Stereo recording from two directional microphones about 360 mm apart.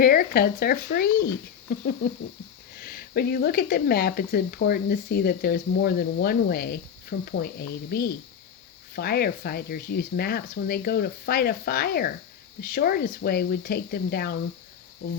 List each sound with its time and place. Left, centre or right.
0.0 s speech: left
2.8 s speech: left